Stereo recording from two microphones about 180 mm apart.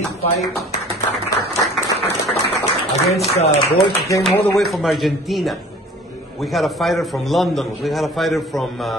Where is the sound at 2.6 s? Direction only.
35° left (ahead or behind).